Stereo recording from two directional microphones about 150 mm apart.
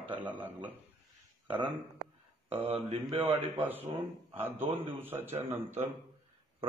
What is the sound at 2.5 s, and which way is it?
Speech, 40° right (ahead or behind).